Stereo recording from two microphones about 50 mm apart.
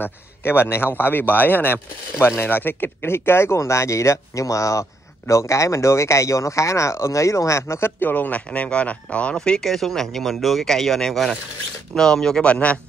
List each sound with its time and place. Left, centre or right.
0.0 s a man's voice: left
7.6 s speech: left
8.0 s speech: left
8.5 s speech: left
9.7 s speech: centre
12.4 s speech: left